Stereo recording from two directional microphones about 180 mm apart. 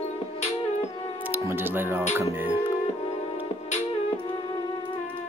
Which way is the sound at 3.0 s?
35° left (ahead or behind).